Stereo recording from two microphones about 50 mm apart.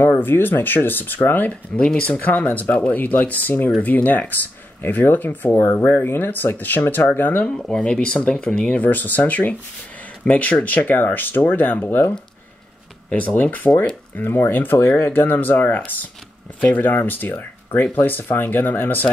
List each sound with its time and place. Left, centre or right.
0.2 s speech: left
1.8 s speech: left
2.2 s speech: left
7.8 s speech: centre
8.7 s speech: left
13.1 s speech: left
14.2 s speech: left